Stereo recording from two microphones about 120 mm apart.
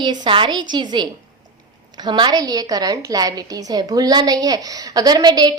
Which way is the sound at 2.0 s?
40° right (ahead or behind).